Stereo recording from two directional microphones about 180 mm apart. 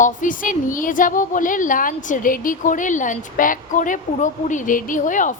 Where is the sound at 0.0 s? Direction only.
45° left (ahead or behind).